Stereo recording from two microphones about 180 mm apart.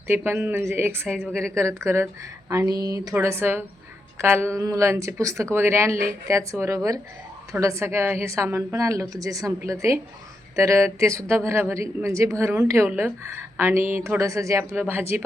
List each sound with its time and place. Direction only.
0.1 s speech: 10° right (ahead or behind)
1.3 s a woman's voice: 5° left (ahead or behind)
1.5 s speech: 15° right (ahead or behind)